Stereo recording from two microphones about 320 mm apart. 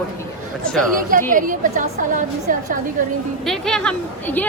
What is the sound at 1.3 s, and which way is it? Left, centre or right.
A woman's voice, right.